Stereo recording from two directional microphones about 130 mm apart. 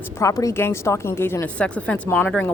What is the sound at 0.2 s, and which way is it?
A woman's voice, 25° left (ahead or behind).